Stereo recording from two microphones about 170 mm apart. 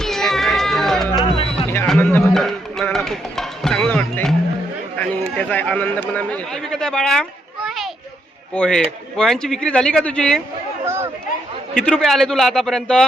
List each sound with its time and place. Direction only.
0.0 s cat: centre (ahead or behind)
1.1 s music: 30° left (ahead or behind)
1.9 s music: 5° left (ahead or behind)
4.9 s speech: 10° left (ahead or behind)
10.8 s chatter: 15° right (ahead or behind)
11.9 s speech: centre (ahead or behind)